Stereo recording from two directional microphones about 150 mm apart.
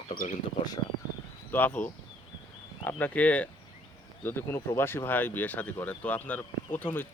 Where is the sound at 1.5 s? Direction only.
10° left (ahead or behind).